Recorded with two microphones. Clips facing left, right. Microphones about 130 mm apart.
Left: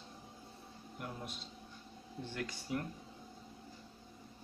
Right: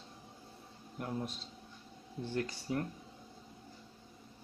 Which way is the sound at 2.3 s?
35° right (ahead or behind).